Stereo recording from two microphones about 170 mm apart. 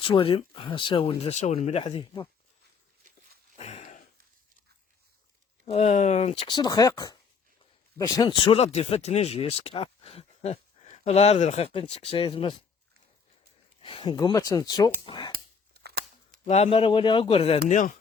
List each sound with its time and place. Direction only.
0.0 s speech: 30° left (ahead or behind)
1.8 s speech: 30° left (ahead or behind)
3.6 s a sound: 40° left (ahead or behind)
5.6 s speech: 40° left (ahead or behind)
13.8 s speech: 30° left (ahead or behind)
15.7 s a sound: 70° right (ahead or behind)
16.5 s speech: 35° left (ahead or behind)
17.7 s speech: 50° left (ahead or behind)